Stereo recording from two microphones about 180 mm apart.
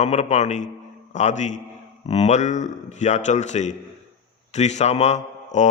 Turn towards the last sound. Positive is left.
turn(degrees=40)  # may be behind; listen again after turning